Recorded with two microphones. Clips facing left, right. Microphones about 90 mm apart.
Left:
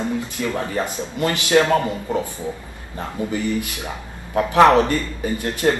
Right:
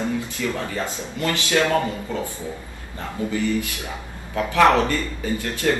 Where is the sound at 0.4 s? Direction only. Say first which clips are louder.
Left 1 dB; 35° left (ahead or behind).